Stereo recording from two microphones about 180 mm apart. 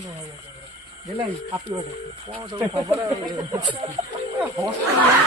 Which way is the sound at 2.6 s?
20° right (ahead or behind).